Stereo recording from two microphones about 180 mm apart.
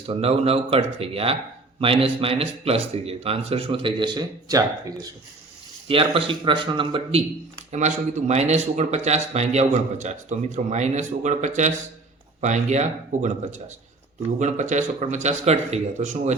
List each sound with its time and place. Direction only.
0.1 s speech: 35° right (ahead or behind)
5.9 s speech: 30° right (ahead or behind)
7.7 s speech: 40° right (ahead or behind)